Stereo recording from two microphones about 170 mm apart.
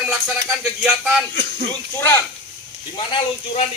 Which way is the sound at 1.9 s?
15° left (ahead or behind).